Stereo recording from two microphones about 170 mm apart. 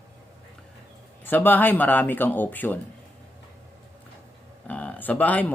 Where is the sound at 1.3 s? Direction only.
10° left (ahead or behind).